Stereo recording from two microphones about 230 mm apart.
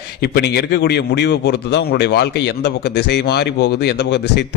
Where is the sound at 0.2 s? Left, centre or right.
Left.